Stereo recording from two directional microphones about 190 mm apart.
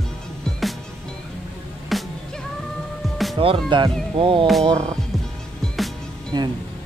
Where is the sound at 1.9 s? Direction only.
Centre (ahead or behind).